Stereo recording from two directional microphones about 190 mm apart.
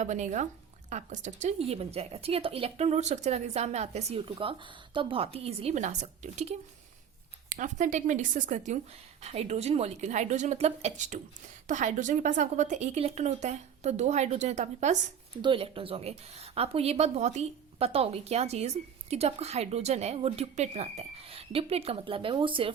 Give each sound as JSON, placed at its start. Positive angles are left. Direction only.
{"t": 0.0, "sound": "a woman's voice", "side_deg": -40}
{"t": 15.4, "sound": "a woman's voice", "side_deg": -25}